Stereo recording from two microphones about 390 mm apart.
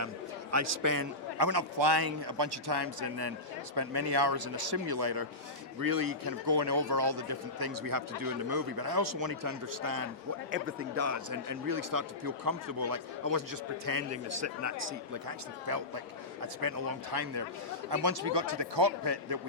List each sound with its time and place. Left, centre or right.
0.5 s a man's voice: right
10.5 s speech: right
14.1 s a man's voice: right